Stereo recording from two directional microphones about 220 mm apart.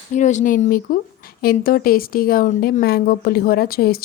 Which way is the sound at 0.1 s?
35° left (ahead or behind).